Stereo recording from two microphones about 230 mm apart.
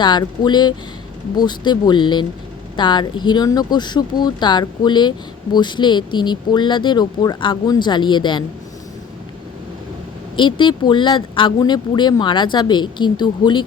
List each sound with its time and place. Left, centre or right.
0.0 s speech: centre
10.3 s speech: left